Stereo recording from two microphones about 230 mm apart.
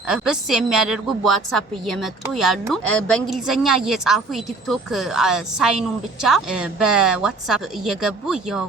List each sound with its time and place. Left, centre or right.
0.1 s a woman's voice: centre